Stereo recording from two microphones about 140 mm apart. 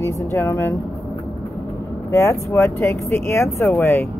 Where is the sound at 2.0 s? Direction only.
20° left (ahead or behind).